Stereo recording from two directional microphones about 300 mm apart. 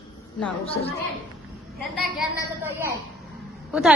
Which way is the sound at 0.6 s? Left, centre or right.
Centre.